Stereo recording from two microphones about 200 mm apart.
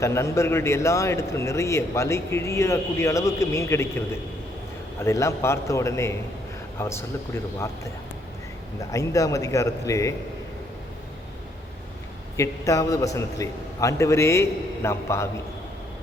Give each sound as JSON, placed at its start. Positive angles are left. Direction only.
{"t": 0.0, "sound": "a man's voice", "side_deg": 15}
{"t": 8.8, "sound": "a man's voice", "side_deg": 15}
{"t": 12.4, "sound": "a man's voice", "side_deg": 15}